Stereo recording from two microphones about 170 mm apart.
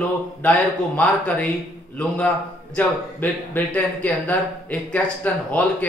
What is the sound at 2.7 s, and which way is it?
Speech, 10° left (ahead or behind).